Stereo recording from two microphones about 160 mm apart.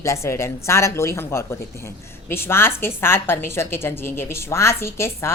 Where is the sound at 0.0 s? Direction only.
20° left (ahead or behind).